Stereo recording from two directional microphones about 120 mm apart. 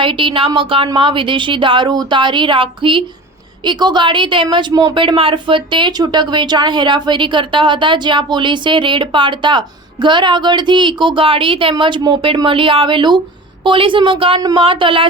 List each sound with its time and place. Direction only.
0.0 s a woman's voice: 45° right (ahead or behind)